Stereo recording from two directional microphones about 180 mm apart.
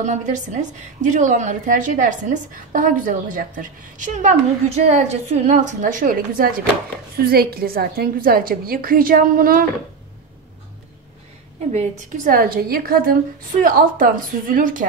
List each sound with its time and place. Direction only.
0.0 s a woman's voice: 40° right (ahead or behind)
11.7 s a woman's voice: 40° right (ahead or behind)